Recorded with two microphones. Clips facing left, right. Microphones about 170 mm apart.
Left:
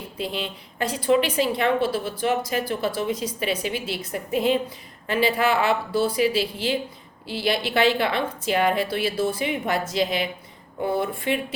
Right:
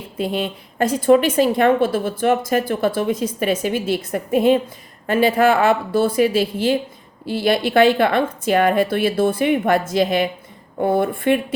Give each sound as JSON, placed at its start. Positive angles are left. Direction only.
{"t": 0.2, "sound": "a woman's voice", "side_deg": -50}